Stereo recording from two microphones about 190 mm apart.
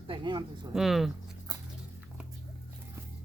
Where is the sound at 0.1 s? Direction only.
25° right (ahead or behind).